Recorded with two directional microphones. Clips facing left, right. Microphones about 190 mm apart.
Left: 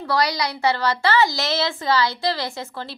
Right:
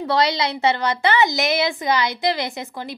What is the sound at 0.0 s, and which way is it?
A woman's voice, 25° right (ahead or behind).